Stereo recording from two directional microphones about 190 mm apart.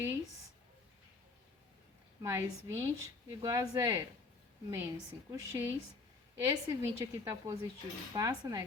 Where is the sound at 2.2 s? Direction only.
15° right (ahead or behind).